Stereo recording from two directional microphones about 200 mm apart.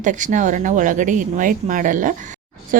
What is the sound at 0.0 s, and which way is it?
Speech, 40° right (ahead or behind).